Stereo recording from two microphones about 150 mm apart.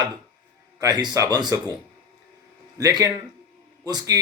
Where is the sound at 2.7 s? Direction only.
25° right (ahead or behind).